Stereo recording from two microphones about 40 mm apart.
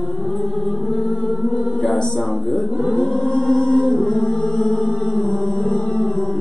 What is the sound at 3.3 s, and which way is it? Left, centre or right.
Music, centre.